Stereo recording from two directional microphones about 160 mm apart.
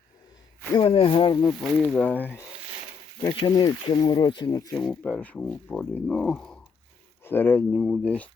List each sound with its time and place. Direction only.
0.7 s speech: 35° left (ahead or behind)
1.6 s speech: 5° left (ahead or behind)
3.2 s speech: 25° left (ahead or behind)
4.9 s speech: 10° left (ahead or behind)